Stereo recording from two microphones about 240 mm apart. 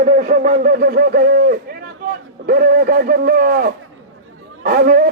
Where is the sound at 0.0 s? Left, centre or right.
Right.